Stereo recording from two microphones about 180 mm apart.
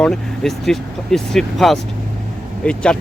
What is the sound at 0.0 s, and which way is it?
Speech, centre (ahead or behind).